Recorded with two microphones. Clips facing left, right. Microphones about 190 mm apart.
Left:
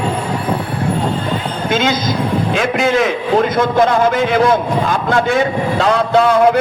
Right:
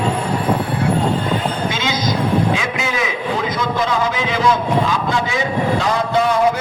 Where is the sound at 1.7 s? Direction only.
55° left (ahead or behind).